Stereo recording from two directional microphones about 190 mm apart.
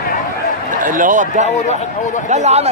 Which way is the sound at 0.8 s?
45° right (ahead or behind).